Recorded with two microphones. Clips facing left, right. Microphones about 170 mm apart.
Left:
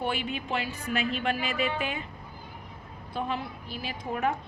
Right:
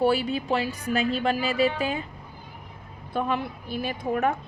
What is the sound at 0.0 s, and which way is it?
A woman's voice, 35° right (ahead or behind).